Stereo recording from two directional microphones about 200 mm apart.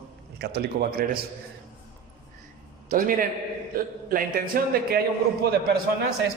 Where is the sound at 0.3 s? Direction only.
55° right (ahead or behind).